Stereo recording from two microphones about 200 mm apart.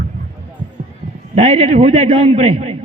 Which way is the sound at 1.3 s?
30° right (ahead or behind).